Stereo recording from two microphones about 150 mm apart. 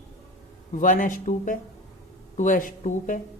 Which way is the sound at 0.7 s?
65° left (ahead or behind).